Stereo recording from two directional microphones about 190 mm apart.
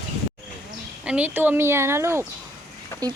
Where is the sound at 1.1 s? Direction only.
10° right (ahead or behind).